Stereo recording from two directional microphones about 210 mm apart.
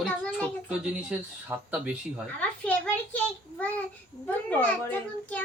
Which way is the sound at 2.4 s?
5° left (ahead or behind).